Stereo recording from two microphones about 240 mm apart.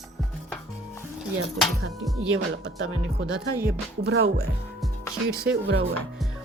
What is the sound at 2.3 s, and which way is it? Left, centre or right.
Speech, right.